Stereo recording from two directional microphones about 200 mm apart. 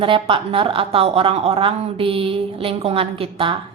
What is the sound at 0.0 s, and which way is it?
Speech, 25° right (ahead or behind).